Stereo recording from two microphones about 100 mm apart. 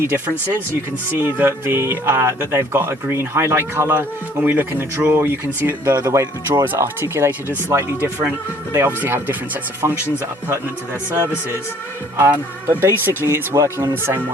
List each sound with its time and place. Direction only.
0.1 s speech: 25° right (ahead or behind)
6.0 s speech: 35° right (ahead or behind)
12.3 s speech: 20° right (ahead or behind)